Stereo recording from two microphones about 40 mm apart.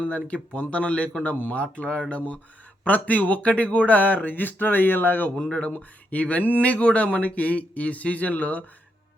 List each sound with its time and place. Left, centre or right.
0.3 s speech: left
5.5 s speech: left